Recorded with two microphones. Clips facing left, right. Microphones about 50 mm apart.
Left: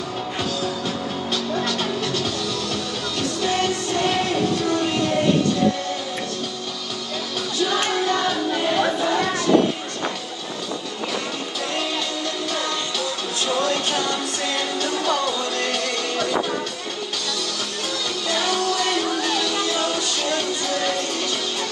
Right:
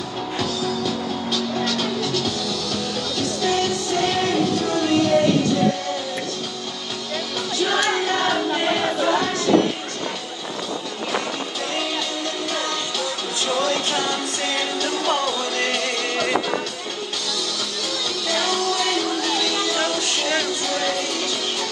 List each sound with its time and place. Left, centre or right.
1.3 s music: left
7.6 s music: right
14.8 s music: right
18.6 s music: left
20.2 s music: right